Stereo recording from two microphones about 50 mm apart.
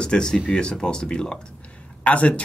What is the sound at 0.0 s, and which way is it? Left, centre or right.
Speech, centre.